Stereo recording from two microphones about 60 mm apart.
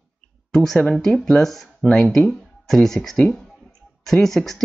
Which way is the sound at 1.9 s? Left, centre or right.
Centre.